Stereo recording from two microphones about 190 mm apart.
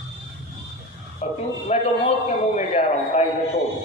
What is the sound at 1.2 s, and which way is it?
A man's voice, 35° left (ahead or behind).